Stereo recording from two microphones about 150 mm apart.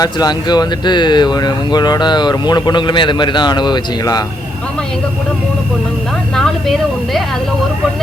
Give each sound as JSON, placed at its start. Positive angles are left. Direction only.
{"t": 0.0, "sound": "speech", "side_deg": 25}
{"t": 6.3, "sound": "a woman's voice", "side_deg": 0}